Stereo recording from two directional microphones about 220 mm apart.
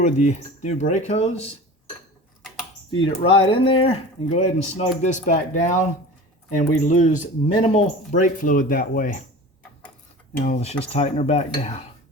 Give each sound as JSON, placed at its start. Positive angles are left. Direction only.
{"t": 0.0, "sound": "speech", "side_deg": 30}
{"t": 3.2, "sound": "speech", "side_deg": 25}
{"t": 10.4, "sound": "speech", "side_deg": 30}